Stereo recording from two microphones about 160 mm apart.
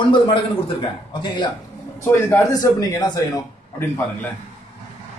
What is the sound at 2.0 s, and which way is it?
A man's voice, 15° left (ahead or behind).